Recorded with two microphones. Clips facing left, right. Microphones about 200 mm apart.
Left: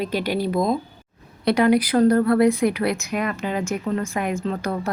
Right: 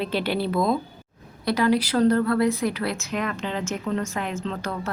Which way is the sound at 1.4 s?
60° left (ahead or behind).